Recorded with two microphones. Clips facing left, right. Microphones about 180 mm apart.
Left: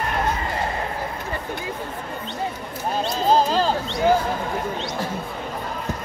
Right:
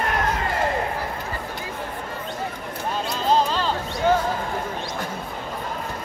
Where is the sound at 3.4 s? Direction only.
40° left (ahead or behind).